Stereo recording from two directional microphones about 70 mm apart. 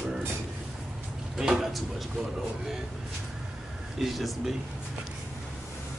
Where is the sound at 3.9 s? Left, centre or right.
Centre.